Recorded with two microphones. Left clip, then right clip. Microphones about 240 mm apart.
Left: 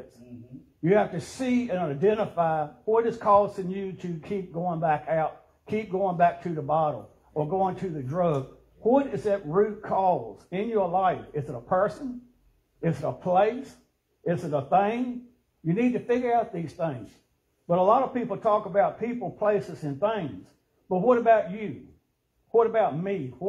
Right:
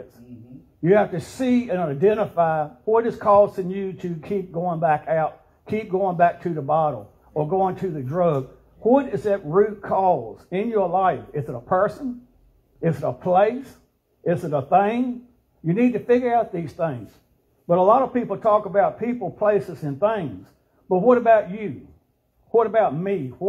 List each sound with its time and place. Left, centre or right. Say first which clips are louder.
0.8 s a man's voice: right 5 dB; right